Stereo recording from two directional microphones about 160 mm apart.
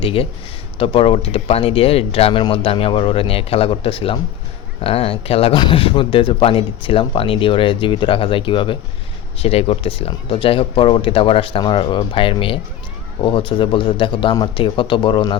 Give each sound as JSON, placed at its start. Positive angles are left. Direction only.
{"t": 0.0, "sound": "speech", "side_deg": 35}